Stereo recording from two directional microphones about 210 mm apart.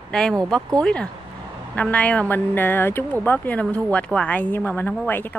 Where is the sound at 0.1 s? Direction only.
5° left (ahead or behind).